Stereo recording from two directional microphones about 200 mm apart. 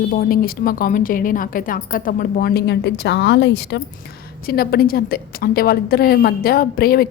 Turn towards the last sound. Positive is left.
turn(degrees=50)  # may be behind; listen again after turning